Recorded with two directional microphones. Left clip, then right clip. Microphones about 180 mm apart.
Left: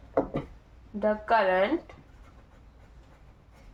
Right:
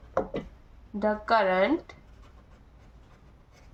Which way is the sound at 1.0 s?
20° right (ahead or behind).